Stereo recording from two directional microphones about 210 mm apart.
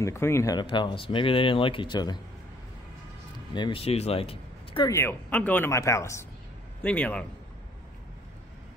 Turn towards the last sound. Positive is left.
turn(degrees=5)  # may be behind; listen again after turning